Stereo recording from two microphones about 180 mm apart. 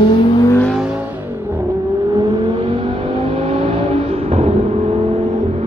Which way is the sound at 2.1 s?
25° right (ahead or behind).